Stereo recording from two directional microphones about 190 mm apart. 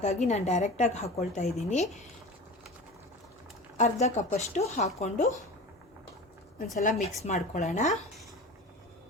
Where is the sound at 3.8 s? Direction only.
40° left (ahead or behind).